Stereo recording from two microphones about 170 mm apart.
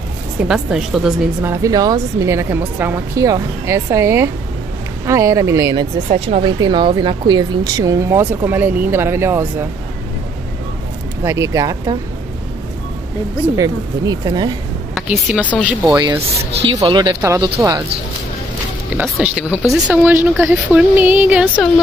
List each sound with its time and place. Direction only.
0.5 s a woman's voice: 5° right (ahead or behind)
1.4 s speech: 15° right (ahead or behind)
6.0 s speech: 35° right (ahead or behind); by 9.7 s 15° right (ahead or behind)
11.2 s speech: 15° right (ahead or behind)
13.6 s speech: 25° right (ahead or behind)
15.0 s speech: 5° right (ahead or behind)
16.6 s speech: 25° right (ahead or behind)
18.9 s speech: 5° right (ahead or behind)